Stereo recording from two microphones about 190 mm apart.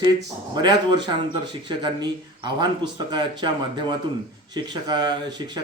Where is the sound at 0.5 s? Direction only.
25° right (ahead or behind).